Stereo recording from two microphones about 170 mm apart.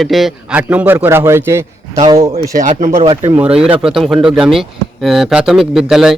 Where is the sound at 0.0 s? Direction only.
Centre (ahead or behind); by 2.3 s 20° right (ahead or behind).